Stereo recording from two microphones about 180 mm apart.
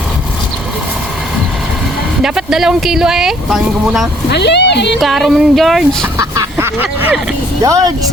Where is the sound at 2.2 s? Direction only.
5° right (ahead or behind).